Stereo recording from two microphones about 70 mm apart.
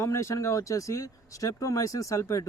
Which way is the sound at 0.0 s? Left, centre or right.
Left.